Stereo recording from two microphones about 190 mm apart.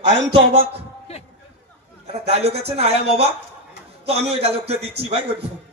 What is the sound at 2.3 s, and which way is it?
A man's voice, 30° right (ahead or behind).